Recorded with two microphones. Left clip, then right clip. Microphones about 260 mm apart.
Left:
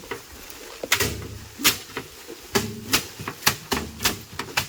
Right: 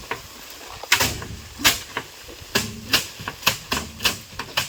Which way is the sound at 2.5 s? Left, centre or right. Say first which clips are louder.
Right 2 dB; centre.